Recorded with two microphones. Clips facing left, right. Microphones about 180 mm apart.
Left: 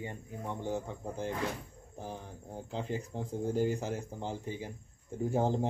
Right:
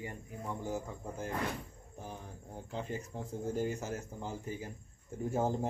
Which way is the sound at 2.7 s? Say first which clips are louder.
Left 3 dB; 30° left (ahead or behind).